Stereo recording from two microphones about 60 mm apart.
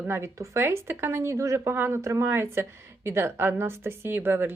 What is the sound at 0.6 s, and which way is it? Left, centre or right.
A woman's voice, right.